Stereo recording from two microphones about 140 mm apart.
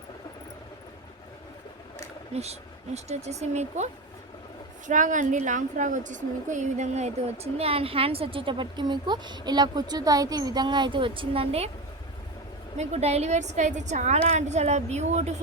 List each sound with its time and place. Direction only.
2.3 s speech: 50° right (ahead or behind)
4.9 s a woman's voice: 65° right (ahead or behind); by 11.7 s 45° right (ahead or behind)
12.7 s a woman's voice: 55° right (ahead or behind)